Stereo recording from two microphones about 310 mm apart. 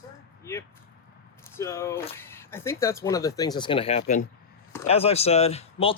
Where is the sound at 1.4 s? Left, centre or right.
Centre.